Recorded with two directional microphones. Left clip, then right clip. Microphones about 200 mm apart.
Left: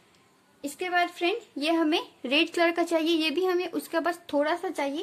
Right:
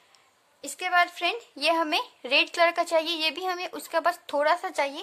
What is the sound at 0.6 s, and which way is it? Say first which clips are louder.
Speech: right 3 dB; 35° right (ahead or behind).